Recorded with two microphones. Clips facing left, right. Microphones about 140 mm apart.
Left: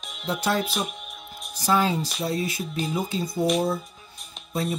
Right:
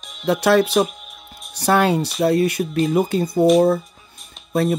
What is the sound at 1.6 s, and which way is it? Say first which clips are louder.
Speech: right 6 dB; 65° right (ahead or behind).